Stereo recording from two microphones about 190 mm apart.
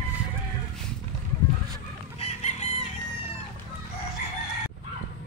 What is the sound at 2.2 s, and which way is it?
Chicken, 35° left (ahead or behind).